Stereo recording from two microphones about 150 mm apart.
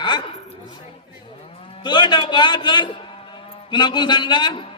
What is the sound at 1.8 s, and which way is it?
A man's voice, 30° left (ahead or behind).